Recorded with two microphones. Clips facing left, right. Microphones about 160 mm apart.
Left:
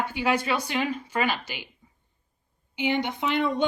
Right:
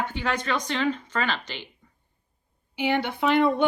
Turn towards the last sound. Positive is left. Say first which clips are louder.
# right 3 dB
turn(degrees=20)  # may be behind; listen again after turning